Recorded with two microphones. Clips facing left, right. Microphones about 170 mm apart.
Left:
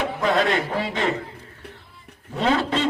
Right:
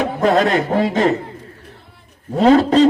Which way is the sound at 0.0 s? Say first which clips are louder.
Right 6 dB; 45° right (ahead or behind).